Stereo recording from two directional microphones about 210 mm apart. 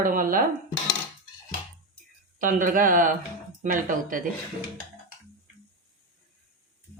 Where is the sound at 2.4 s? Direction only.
40° right (ahead or behind).